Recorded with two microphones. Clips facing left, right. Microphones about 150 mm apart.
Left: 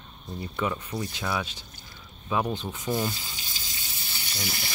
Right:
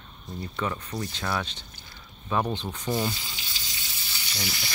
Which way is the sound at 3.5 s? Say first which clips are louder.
Even; 45° left (ahead or behind).